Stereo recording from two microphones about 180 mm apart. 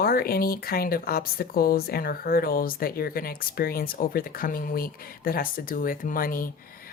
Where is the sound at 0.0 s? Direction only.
55° left (ahead or behind).